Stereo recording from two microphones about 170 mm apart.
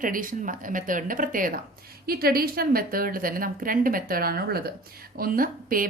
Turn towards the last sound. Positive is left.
turn(degrees=-55)  # may be behind; listen again after turning